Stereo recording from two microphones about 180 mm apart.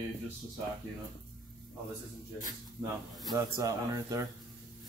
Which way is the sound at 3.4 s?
20° right (ahead or behind).